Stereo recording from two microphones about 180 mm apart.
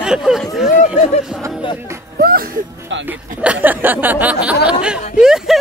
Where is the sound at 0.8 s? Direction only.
40° left (ahead or behind).